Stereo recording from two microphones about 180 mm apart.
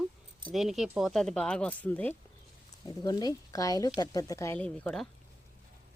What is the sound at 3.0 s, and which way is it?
Speech, 20° left (ahead or behind).